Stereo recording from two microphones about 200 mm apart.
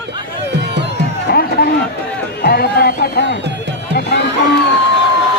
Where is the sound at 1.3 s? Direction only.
50° left (ahead or behind).